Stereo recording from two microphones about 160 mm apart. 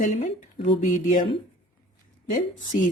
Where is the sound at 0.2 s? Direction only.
45° left (ahead or behind).